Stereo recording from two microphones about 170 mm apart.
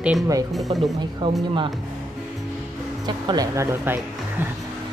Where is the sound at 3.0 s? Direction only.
25° right (ahead or behind).